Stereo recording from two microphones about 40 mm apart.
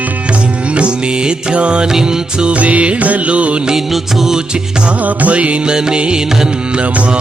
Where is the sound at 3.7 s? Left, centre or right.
Centre.